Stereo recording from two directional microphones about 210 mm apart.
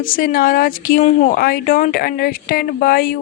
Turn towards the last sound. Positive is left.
turn(degrees=45)  # may be behind; listen again after turning